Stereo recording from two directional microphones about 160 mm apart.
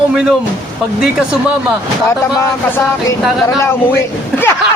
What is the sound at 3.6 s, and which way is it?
Speech, 15° left (ahead or behind).